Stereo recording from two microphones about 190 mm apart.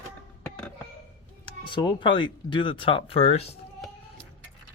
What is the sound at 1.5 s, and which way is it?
Speech, 25° left (ahead or behind).